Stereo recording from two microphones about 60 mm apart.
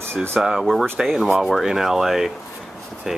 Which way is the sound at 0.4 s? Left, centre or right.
Centre.